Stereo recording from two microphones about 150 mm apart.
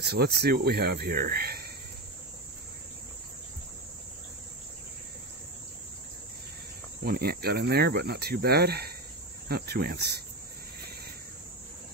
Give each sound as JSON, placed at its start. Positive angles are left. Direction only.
{"t": 0.0, "sound": "speech", "side_deg": -90}
{"t": 7.1, "sound": "speech", "side_deg": -90}